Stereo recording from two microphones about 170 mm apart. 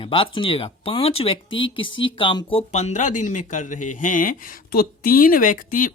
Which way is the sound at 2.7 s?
40° left (ahead or behind).